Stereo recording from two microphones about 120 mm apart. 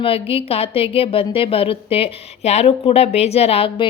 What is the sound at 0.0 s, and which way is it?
A woman's voice, 50° left (ahead or behind).